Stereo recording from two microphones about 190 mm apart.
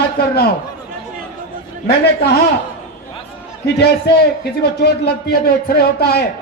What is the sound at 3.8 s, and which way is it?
Speech, 60° left (ahead or behind).